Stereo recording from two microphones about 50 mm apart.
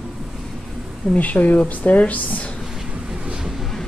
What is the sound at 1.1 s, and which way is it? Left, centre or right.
Speech, left.